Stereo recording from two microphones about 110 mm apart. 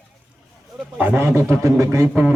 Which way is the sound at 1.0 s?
20° right (ahead or behind).